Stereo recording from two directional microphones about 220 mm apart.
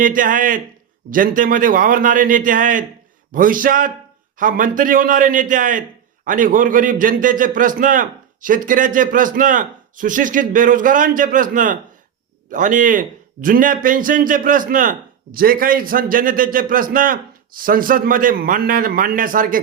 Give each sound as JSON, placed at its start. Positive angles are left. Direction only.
{"t": 0.0, "sound": "a man's voice", "side_deg": -40}